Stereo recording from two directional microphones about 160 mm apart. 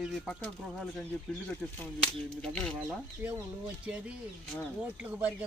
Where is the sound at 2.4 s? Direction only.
5° left (ahead or behind).